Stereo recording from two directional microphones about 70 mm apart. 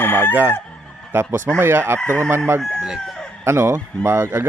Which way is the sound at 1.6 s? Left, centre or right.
Right.